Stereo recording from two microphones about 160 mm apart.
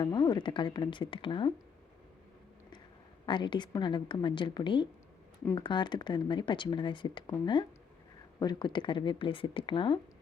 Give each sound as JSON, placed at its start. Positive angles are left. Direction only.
{"t": 0.0, "sound": "speech", "side_deg": 30}
{"t": 3.2, "sound": "speech", "side_deg": 30}